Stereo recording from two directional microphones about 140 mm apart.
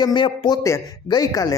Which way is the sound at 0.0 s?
35° left (ahead or behind).